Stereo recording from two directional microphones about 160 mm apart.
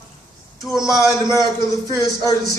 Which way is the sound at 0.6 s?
Centre (ahead or behind).